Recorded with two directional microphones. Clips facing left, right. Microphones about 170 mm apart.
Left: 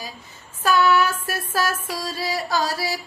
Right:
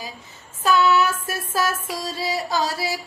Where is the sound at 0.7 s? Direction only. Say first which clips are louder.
Even; 20° right (ahead or behind).